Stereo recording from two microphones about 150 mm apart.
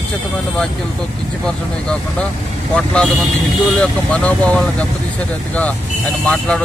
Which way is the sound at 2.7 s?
5° left (ahead or behind).